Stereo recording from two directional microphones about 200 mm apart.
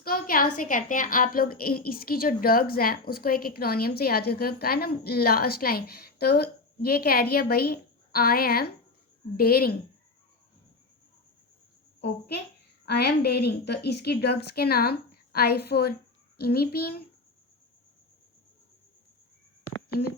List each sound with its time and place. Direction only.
0.0 s a woman's voice: 45° left (ahead or behind)
11.9 s a child's voice: 55° left (ahead or behind)